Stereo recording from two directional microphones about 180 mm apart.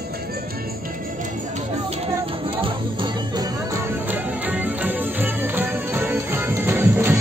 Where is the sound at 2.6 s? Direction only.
25° right (ahead or behind).